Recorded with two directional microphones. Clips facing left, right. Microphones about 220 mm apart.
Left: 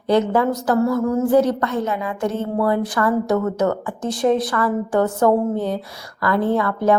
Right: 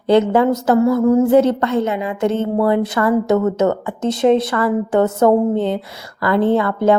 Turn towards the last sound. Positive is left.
turn(degrees=-25)  # may be behind; listen again after turning